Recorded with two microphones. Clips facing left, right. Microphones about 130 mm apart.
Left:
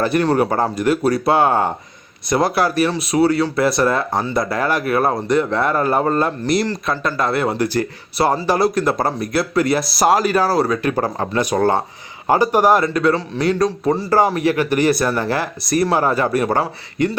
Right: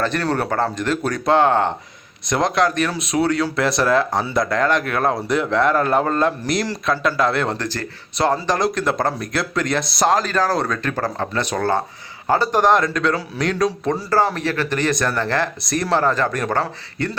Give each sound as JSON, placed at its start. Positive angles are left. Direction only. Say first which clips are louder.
{"t": 0.0, "sound": "speech", "louder": "left 5 dB", "side_deg": 10}
{"t": 14.3, "sound": "speech", "louder": "left 5 dB", "side_deg": 10}